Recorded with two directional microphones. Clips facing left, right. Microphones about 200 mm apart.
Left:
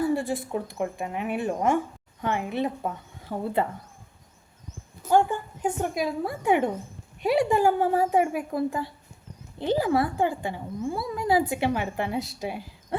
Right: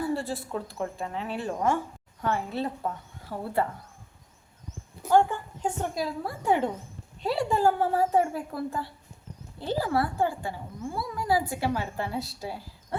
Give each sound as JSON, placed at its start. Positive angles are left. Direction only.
{"t": 0.1, "sound": "speech", "side_deg": 15}
{"t": 5.1, "sound": "speech", "side_deg": 15}